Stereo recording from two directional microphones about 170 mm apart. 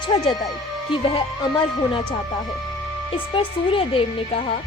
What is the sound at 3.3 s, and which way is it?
A woman's voice, 30° left (ahead or behind).